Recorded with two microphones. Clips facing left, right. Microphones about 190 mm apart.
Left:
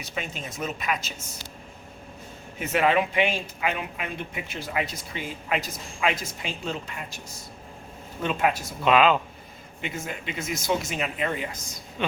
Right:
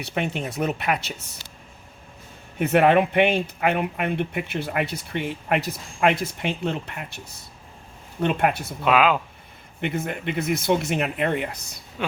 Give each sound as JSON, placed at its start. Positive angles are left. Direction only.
{"t": 0.0, "sound": "speech", "side_deg": -65}
{"t": 2.6, "sound": "speech", "side_deg": -55}
{"t": 8.8, "sound": "speech", "side_deg": -5}
{"t": 9.8, "sound": "speech", "side_deg": -60}
{"t": 12.0, "sound": "speech", "side_deg": -5}